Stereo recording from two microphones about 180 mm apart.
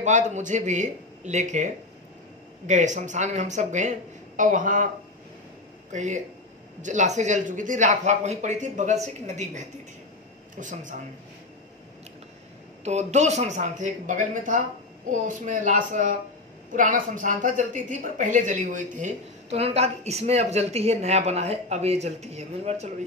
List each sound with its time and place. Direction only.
0.0 s a woman's voice: 40° right (ahead or behind)
5.9 s a woman's voice: 40° right (ahead or behind)
12.8 s a woman's voice: 40° right (ahead or behind)